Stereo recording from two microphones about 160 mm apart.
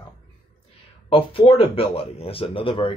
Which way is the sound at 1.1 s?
35° left (ahead or behind).